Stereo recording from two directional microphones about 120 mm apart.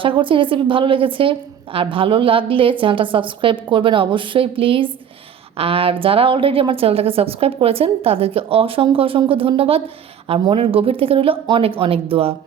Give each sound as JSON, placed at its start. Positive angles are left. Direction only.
{"t": 0.0, "sound": "a woman's voice", "side_deg": -45}